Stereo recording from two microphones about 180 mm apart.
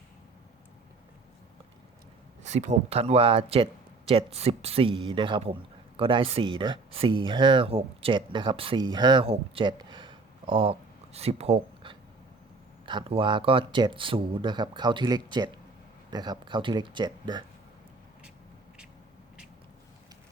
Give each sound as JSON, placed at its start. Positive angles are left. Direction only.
{"t": 2.4, "sound": "speech", "side_deg": -40}